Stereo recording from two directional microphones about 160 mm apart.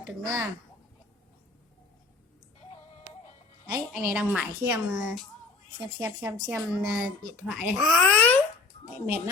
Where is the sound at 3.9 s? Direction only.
5° right (ahead or behind).